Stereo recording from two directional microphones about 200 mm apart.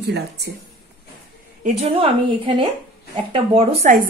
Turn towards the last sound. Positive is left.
turn(degrees=-30)  # may be behind; listen again after turning